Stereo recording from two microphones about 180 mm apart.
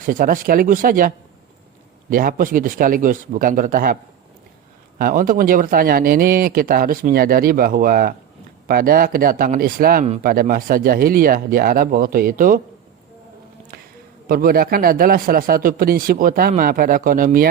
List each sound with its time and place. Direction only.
0.0 s speech: 50° right (ahead or behind)
4.9 s speech: 50° right (ahead or behind)
14.3 s speech: 55° right (ahead or behind)